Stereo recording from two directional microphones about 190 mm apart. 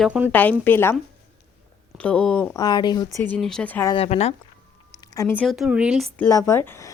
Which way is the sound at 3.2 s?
5° left (ahead or behind).